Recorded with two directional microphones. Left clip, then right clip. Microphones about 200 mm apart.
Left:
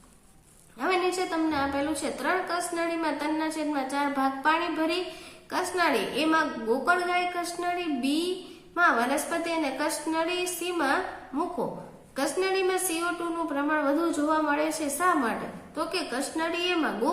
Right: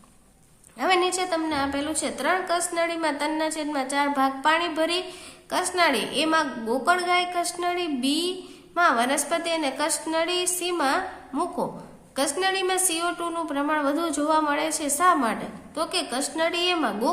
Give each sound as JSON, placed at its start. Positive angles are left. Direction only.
{"t": 0.8, "sound": "a woman's voice", "side_deg": -40}